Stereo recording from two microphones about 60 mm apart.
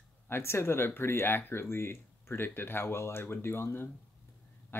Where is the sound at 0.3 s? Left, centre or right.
Left.